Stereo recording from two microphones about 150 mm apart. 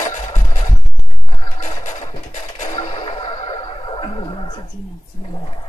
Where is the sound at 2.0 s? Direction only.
50° left (ahead or behind).